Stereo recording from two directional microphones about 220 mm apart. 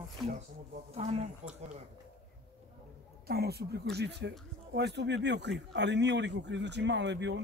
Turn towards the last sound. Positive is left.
turn(degrees=-55)  # may be behind; listen again after turning